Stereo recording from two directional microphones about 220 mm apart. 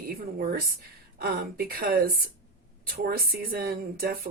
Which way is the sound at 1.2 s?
45° right (ahead or behind).